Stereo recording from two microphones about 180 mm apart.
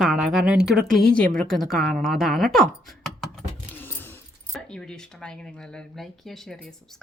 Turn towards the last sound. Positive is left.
turn(degrees=0)  # may be behind; listen again after turning